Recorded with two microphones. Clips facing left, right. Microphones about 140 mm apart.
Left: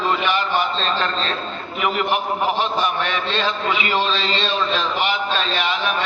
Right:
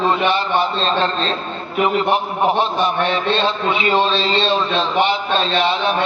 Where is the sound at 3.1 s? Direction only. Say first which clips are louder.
Right 4 dB; 30° right (ahead or behind).